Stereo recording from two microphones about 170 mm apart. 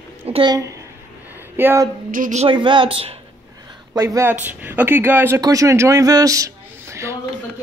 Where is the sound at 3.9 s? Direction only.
20° right (ahead or behind).